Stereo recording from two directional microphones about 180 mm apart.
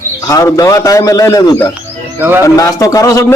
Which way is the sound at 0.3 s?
20° left (ahead or behind).